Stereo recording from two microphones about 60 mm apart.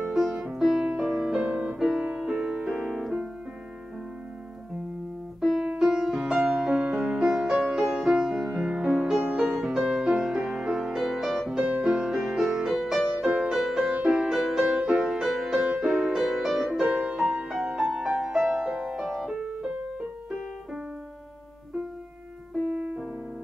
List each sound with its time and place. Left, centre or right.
0.1 s music: centre
5.4 s music: centre
22.6 s music: centre